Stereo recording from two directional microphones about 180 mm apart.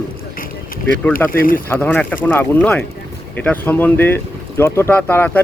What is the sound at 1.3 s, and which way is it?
Speech, 50° left (ahead or behind).